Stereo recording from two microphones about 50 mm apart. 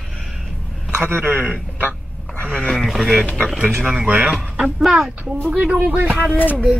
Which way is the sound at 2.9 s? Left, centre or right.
Centre.